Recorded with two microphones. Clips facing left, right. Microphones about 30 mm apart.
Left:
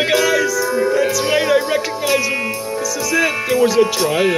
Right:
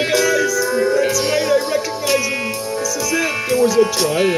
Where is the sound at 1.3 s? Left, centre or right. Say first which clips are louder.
Left 1 dB; left.